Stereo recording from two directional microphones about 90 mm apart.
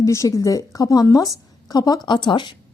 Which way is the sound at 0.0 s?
35° left (ahead or behind).